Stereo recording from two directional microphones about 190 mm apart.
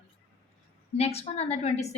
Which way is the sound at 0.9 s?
35° left (ahead or behind).